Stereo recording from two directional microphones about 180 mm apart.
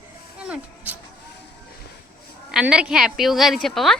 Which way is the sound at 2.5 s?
5° right (ahead or behind).